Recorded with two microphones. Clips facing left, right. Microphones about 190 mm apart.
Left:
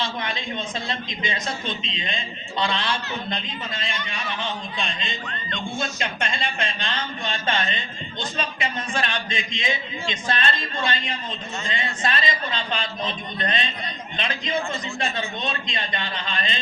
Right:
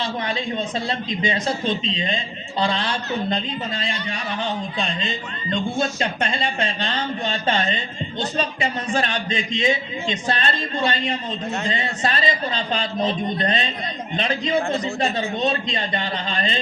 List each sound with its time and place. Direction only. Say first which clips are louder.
0.0 s a man's voice: right 4 dB; 35° right (ahead or behind)